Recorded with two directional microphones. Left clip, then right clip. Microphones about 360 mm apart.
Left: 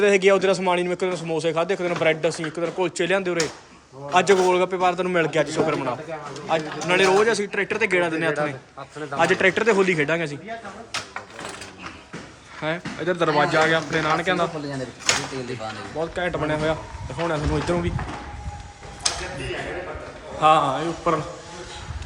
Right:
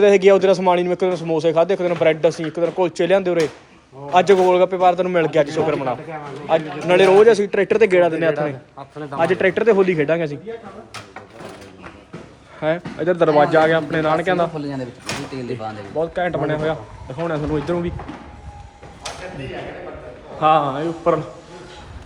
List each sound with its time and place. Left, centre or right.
0.0 s a man's voice: centre
12.5 s a man's voice: centre
16.0 s a man's voice: centre
20.4 s a man's voice: centre